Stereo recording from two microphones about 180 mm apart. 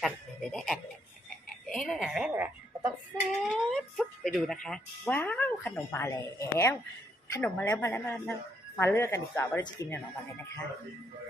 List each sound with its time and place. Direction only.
0.0 s a woman's voice: centre (ahead or behind)
3.2 s a woman's voice: 5° left (ahead or behind)